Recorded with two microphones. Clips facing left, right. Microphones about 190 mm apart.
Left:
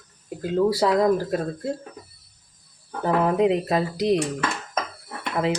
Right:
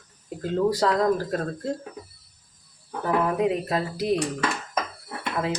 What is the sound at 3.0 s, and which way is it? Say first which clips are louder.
Speech: left 3 dB; 20° left (ahead or behind).